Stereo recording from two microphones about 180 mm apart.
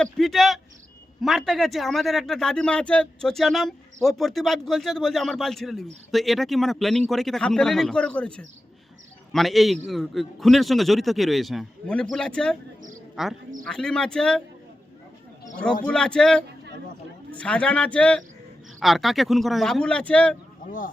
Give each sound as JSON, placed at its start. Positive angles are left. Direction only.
{"t": 0.0, "sound": "a man's voice", "side_deg": 0}
{"t": 15.5, "sound": "a man's voice", "side_deg": 5}
{"t": 20.7, "sound": "speech", "side_deg": 50}